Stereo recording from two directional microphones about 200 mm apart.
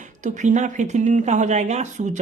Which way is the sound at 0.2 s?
35° right (ahead or behind).